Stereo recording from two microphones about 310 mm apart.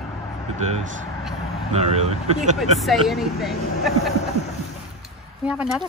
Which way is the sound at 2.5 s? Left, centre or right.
Centre.